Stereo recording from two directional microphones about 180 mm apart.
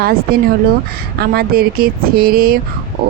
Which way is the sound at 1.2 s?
55° right (ahead or behind).